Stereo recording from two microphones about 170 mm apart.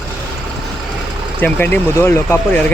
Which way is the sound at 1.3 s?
10° left (ahead or behind).